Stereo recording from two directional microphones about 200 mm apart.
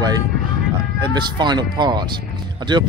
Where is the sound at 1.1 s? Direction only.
20° right (ahead or behind).